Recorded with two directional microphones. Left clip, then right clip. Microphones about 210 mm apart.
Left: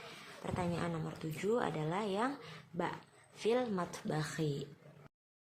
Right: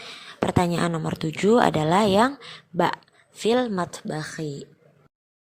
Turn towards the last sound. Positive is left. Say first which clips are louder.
# right 7 dB
turn(degrees=-25)  # may be behind; listen again after turning